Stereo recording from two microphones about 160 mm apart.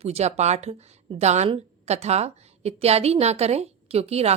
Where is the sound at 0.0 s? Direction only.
40° right (ahead or behind).